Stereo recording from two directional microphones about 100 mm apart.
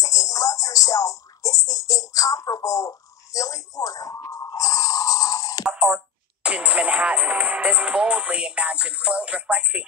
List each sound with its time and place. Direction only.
0.0 s speech: 35° left (ahead or behind)
5.7 s speech: 5° right (ahead or behind)